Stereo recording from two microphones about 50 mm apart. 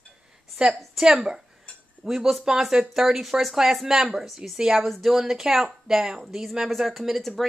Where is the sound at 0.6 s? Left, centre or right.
Centre.